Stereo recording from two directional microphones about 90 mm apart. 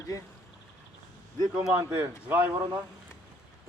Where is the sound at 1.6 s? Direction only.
15° right (ahead or behind).